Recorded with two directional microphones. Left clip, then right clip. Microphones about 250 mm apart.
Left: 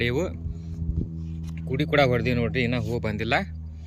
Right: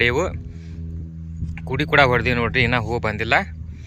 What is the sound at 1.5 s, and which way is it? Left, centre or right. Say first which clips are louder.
Speech: right 6 dB; centre.